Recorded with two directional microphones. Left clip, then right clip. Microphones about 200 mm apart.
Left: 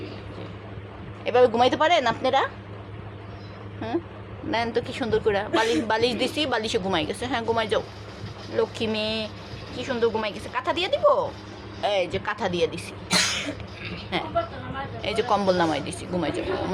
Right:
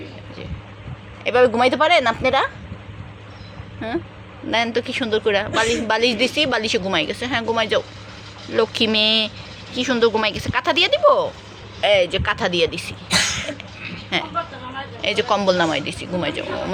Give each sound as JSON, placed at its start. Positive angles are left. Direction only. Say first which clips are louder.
{"t": 1.2, "sound": "a woman's voice", "louder": "right 3 dB", "side_deg": -10}
{"t": 3.8, "sound": "a woman's voice", "louder": "right 3 dB", "side_deg": -10}
{"t": 8.5, "sound": "a woman's voice", "louder": "right 8 dB", "side_deg": -25}
{"t": 15.0, "sound": "a woman's voice", "louder": "right 5 dB", "side_deg": -10}